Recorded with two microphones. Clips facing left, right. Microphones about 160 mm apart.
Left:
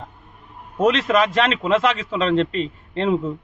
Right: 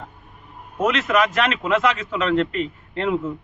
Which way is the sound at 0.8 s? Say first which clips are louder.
Left 2 dB; 30° left (ahead or behind).